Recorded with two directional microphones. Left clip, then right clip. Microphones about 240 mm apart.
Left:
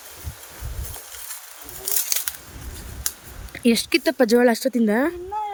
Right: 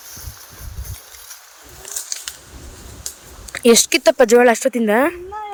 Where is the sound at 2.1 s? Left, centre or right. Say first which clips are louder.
Left 2 dB; left.